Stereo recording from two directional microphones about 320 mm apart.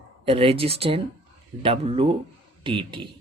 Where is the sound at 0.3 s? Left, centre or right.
Centre.